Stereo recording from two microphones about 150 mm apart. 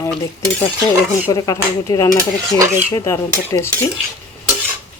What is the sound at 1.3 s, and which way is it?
Speech, 25° left (ahead or behind).